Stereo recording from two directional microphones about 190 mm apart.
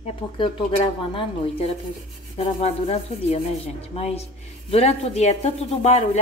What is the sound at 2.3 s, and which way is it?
Speech, 35° left (ahead or behind).